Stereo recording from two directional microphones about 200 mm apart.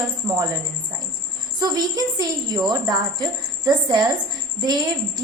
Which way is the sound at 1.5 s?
20° right (ahead or behind).